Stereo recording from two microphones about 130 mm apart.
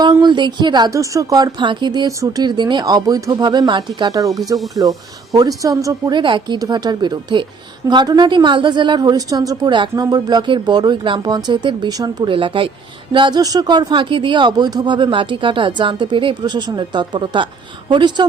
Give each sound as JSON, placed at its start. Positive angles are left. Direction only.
{"t": 0.0, "sound": "speech", "side_deg": -35}
{"t": 4.5, "sound": "speech", "side_deg": 0}
{"t": 4.8, "sound": "speech", "side_deg": -30}